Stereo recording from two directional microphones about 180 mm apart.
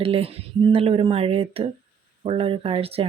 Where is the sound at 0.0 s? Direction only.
30° right (ahead or behind).